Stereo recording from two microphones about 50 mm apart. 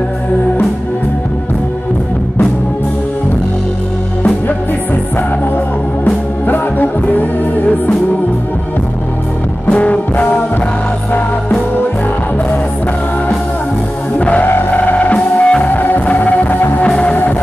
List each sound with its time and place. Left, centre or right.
6.4 s music: left
9.7 s music: left
14.1 s music: left